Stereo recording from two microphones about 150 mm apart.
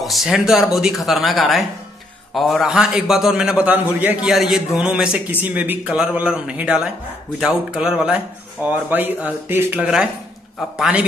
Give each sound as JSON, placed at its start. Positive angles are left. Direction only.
{"t": 0.0, "sound": "a man's voice", "side_deg": 0}